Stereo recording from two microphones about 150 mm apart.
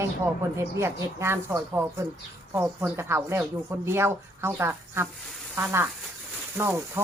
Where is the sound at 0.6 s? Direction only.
15° right (ahead or behind).